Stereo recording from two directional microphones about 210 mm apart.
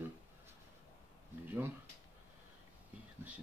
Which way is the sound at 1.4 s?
10° right (ahead or behind).